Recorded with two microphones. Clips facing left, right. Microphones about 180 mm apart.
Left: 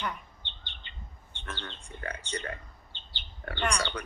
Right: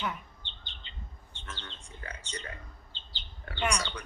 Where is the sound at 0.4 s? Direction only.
60° left (ahead or behind).